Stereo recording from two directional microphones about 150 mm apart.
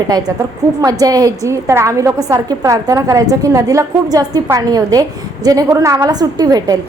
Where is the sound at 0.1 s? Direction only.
25° right (ahead or behind).